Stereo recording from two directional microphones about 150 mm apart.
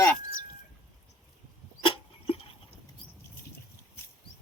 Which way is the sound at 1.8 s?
40° left (ahead or behind).